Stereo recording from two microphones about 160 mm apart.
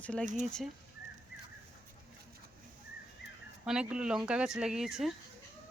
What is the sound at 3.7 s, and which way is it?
Speech, 5° right (ahead or behind).